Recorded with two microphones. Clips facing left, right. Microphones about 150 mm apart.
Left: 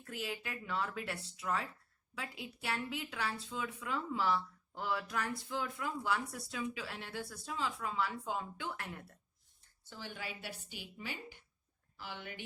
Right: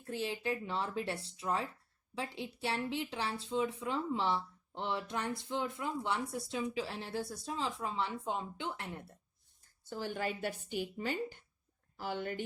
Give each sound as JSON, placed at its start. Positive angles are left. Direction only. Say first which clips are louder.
{"t": 0.0, "sound": "speech", "louder": "right 5 dB", "side_deg": -30}
{"t": 9.9, "sound": "a woman's voice", "louder": "right 8 dB", "side_deg": -45}